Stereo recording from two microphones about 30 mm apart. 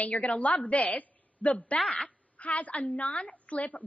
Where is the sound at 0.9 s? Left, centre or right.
Left.